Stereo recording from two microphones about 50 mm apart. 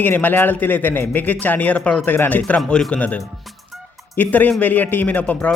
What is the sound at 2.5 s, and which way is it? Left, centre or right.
Speech, centre.